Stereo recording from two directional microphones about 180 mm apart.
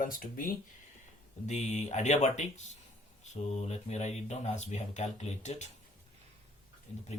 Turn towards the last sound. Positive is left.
turn(degrees=40)  # may be behind; listen again after turning